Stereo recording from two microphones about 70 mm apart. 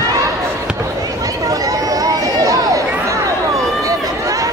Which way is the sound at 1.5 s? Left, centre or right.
Right.